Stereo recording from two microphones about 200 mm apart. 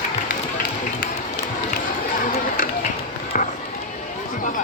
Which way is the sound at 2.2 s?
40° left (ahead or behind).